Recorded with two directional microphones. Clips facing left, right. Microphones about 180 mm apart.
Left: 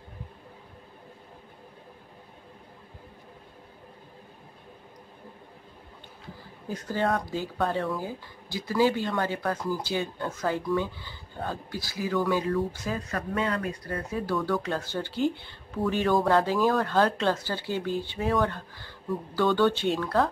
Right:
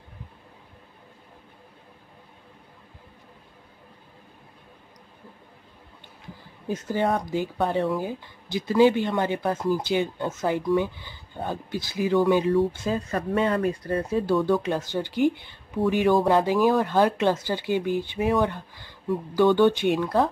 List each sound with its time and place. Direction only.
6.7 s speech: 20° right (ahead or behind)